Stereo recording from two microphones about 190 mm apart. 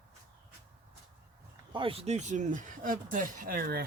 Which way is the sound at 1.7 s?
30° right (ahead or behind).